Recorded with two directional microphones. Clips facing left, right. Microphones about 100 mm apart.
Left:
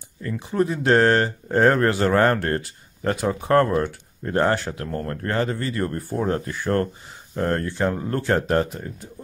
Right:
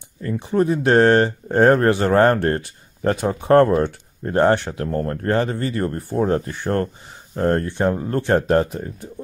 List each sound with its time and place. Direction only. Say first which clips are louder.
0.2 s speech: right 3 dB; 35° right (ahead or behind)